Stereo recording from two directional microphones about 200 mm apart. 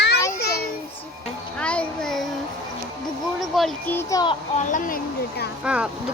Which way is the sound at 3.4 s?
Centre (ahead or behind).